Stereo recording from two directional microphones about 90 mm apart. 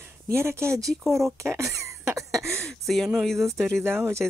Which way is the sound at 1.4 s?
30° right (ahead or behind).